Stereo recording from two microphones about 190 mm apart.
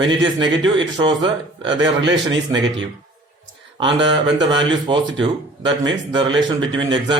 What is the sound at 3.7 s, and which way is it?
Speech, 25° right (ahead or behind).